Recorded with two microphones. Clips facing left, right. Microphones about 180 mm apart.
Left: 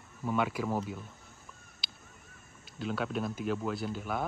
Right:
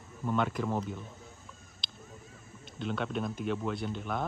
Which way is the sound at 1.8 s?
5° left (ahead or behind).